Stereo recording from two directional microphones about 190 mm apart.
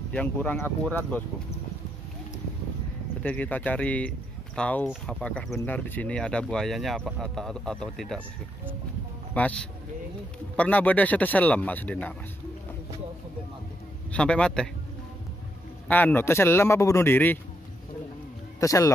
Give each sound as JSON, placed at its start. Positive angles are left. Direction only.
{"t": 0.1, "sound": "speech", "side_deg": 10}
{"t": 3.2, "sound": "speech", "side_deg": 10}
{"t": 9.3, "sound": "speech", "side_deg": 5}
{"t": 14.1, "sound": "speech", "side_deg": 5}
{"t": 15.9, "sound": "speech", "side_deg": 10}
{"t": 18.6, "sound": "speech", "side_deg": 15}